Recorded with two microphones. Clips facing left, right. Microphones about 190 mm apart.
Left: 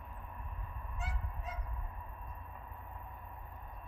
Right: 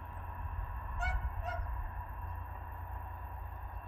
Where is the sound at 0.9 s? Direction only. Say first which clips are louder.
Right 4 dB; 65° right (ahead or behind).